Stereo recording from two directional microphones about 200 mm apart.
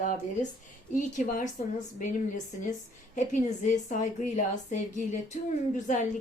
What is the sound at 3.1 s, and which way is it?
Speech, 40° left (ahead or behind).